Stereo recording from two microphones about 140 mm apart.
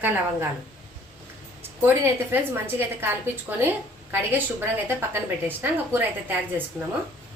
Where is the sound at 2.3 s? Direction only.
15° right (ahead or behind).